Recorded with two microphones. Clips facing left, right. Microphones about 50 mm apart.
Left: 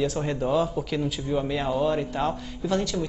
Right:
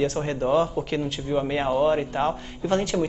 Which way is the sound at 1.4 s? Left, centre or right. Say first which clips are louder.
Right 5 dB; right.